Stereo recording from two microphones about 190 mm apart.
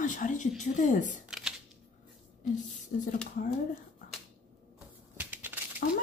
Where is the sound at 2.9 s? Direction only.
40° left (ahead or behind).